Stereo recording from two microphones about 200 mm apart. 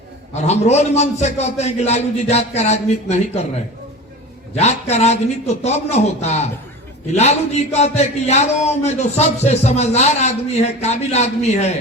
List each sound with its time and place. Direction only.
0.3 s a man's voice: 35° left (ahead or behind)
4.5 s a man's voice: 35° left (ahead or behind)